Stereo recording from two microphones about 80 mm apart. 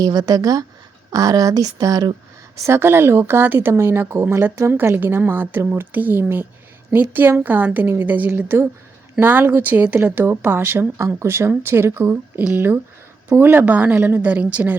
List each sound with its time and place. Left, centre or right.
0.0 s speech: right
2.6 s a woman's voice: right